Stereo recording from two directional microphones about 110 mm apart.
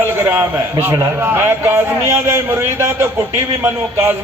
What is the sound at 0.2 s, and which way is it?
A man's voice, 20° right (ahead or behind).